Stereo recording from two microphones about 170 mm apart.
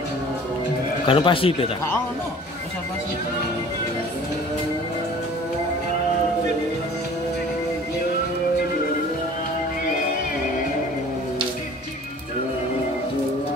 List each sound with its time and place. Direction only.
1.0 s speech: 30° left (ahead or behind)